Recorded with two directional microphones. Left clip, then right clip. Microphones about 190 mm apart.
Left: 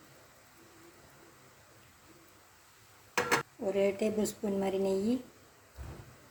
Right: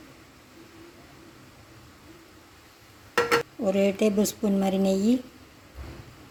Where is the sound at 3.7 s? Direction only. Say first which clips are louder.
Right 6 dB; 45° right (ahead or behind).